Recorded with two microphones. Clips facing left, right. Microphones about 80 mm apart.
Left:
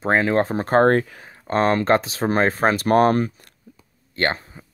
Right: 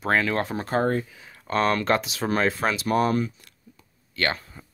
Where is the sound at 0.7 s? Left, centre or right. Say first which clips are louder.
Left 8 dB; left.